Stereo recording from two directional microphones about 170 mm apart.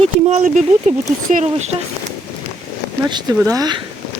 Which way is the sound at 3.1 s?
25° right (ahead or behind).